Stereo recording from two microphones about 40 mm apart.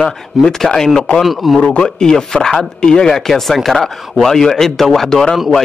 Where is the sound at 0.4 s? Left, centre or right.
Centre.